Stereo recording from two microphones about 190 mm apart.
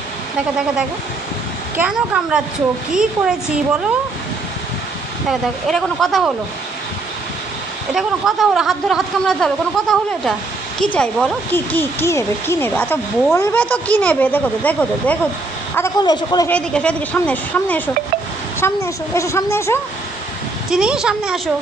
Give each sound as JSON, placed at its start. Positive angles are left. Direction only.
{"t": 1.8, "sound": "speech", "side_deg": -5}
{"t": 5.7, "sound": "speech", "side_deg": 5}
{"t": 7.9, "sound": "speech", "side_deg": 0}
{"t": 16.0, "sound": "a man's voice", "side_deg": 20}
{"t": 16.4, "sound": "speech", "side_deg": 5}
{"t": 20.7, "sound": "speech", "side_deg": -5}